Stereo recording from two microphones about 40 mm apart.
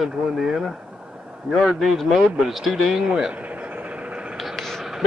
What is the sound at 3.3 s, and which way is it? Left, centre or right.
Vehicle, right.